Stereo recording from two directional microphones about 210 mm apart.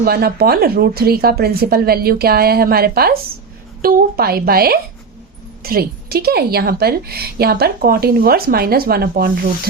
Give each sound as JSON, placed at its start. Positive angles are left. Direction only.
{"t": 0.0, "sound": "a woman's voice", "side_deg": -45}